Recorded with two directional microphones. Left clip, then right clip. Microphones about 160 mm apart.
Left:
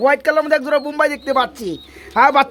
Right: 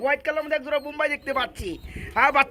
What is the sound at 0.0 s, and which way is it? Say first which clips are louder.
Speech: left 10 dB; 40° left (ahead or behind).